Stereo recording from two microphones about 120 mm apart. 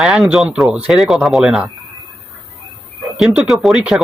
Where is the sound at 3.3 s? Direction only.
5° right (ahead or behind).